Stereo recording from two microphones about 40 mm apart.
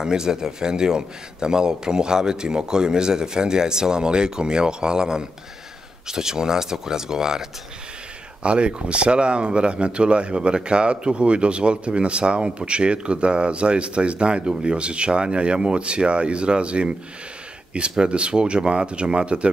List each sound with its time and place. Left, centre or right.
0.0 s speech: centre
8.4 s speech: right